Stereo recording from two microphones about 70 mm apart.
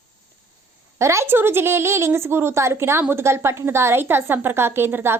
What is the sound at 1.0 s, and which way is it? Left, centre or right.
A woman's voice, right.